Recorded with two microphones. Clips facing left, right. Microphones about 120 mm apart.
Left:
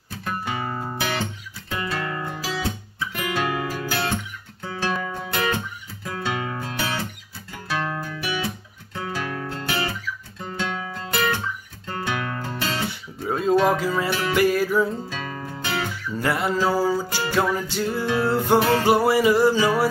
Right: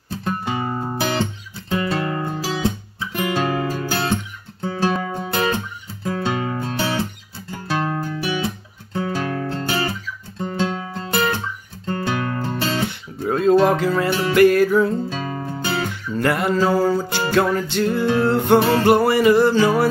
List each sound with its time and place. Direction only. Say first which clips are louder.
0.1 s music: right 4 dB; 30° right (ahead or behind)
1.7 s guitar: right 6 dB; 30° right (ahead or behind)
4.6 s music: right 5 dB; 30° right (ahead or behind)
13.2 s a sound: right 5 dB; 5° left (ahead or behind)
13.7 s music: right 3 dB; 5° left (ahead or behind)
15.0 s music: right 5 dB; 30° right (ahead or behind)
16.1 s music: right 4 dB; 5° left (ahead or behind)
18.6 s music: right 3 dB; 25° right (ahead or behind)
18.9 s music: right 4 dB; 5° left (ahead or behind)